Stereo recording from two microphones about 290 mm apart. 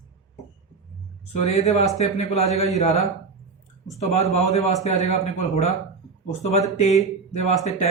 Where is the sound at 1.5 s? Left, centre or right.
Left.